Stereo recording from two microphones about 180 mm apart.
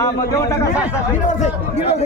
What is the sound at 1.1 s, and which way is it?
Speech, 45° left (ahead or behind).